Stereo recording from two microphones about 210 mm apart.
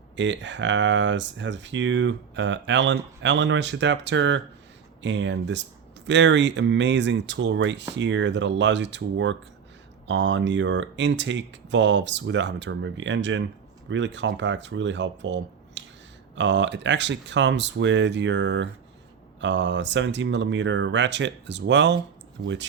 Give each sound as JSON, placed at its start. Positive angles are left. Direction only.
{"t": 0.2, "sound": "speech", "side_deg": -60}